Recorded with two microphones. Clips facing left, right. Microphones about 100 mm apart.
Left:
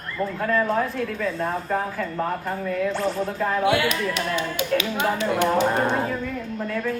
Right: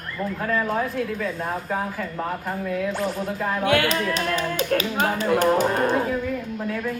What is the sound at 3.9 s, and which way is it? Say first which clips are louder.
Speech: right 1 dB; 35° right (ahead or behind).